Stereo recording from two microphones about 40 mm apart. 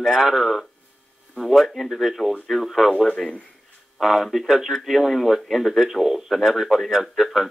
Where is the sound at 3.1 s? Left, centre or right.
Left.